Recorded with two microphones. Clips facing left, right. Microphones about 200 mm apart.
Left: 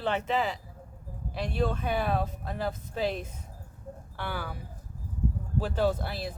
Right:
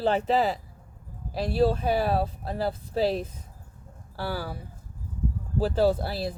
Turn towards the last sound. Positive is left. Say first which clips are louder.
# right 5 dB
turn(degrees=-35)  # may be behind; listen again after turning